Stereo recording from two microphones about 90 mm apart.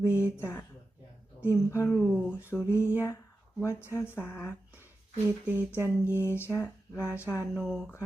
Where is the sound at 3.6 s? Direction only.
30° left (ahead or behind).